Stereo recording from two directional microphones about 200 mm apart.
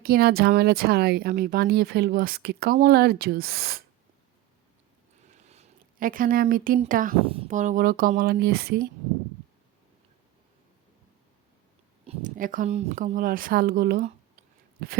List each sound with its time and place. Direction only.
0.0 s speech: 50° right (ahead or behind)
5.5 s speech: 35° right (ahead or behind)
7.2 s speech: 30° right (ahead or behind); by 8.9 s 50° right (ahead or behind)
12.0 s speech: 40° right (ahead or behind)